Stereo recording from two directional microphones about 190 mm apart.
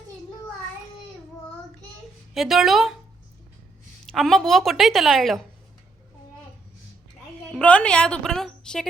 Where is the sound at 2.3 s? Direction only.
Centre (ahead or behind).